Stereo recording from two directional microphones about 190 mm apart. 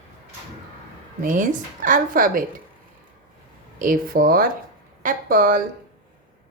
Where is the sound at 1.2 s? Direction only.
45° right (ahead or behind).